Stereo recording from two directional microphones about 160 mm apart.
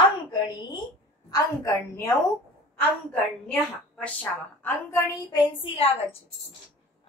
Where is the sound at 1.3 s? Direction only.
20° left (ahead or behind).